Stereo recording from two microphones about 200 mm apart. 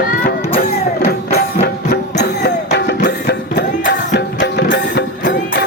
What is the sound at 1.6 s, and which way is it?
Music, 50° left (ahead or behind).